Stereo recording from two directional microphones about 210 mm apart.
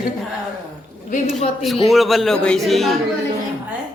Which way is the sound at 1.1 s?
30° left (ahead or behind).